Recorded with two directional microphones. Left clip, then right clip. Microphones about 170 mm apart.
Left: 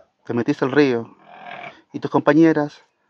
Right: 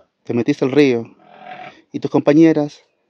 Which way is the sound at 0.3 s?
25° right (ahead or behind).